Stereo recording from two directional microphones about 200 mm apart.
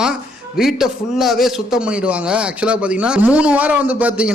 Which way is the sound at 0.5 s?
Centre (ahead or behind).